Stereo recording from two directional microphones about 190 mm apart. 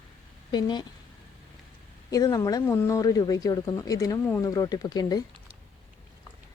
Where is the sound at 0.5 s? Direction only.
25° left (ahead or behind).